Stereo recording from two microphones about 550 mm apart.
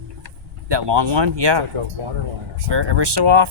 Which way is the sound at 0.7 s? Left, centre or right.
Right.